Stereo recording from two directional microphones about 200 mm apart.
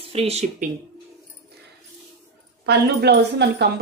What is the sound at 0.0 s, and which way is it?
Speech, 30° right (ahead or behind).